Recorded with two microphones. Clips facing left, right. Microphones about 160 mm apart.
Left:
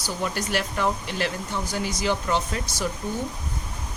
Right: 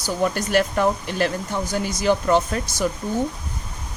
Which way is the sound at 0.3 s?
50° right (ahead or behind).